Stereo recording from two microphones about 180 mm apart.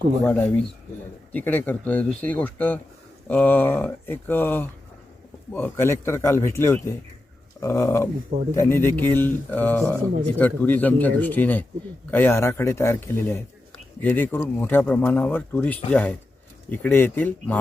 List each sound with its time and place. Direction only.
0.3 s speech: 10° left (ahead or behind)